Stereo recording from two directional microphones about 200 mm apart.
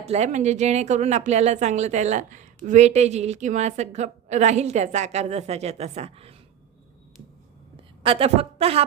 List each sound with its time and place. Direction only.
0.0 s a woman's voice: 35° right (ahead or behind)
8.0 s a woman's voice: 30° right (ahead or behind)